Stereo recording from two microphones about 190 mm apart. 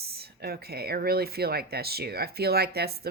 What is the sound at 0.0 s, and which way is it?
Speech, 55° right (ahead or behind).